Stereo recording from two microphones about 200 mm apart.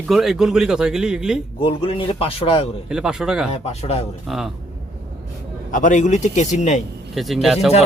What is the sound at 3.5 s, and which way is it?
Speech, 30° left (ahead or behind).